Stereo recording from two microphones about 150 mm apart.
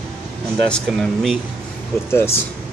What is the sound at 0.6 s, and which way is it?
Speech, 5° left (ahead or behind).